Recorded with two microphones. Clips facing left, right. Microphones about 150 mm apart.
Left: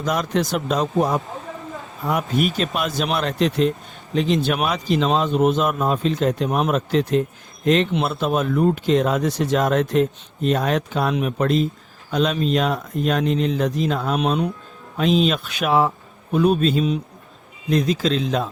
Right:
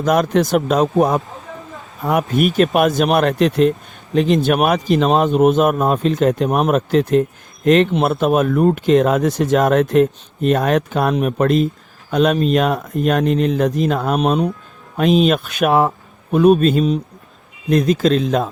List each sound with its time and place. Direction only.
0.0 s speech: 55° right (ahead or behind)